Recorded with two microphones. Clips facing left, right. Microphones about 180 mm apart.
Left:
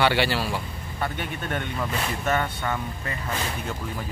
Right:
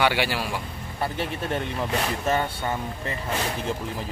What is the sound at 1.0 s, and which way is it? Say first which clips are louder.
Speech: right 2 dB; 30° right (ahead or behind).